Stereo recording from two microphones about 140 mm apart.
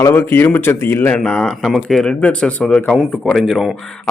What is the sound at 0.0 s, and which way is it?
Speech, 15° left (ahead or behind).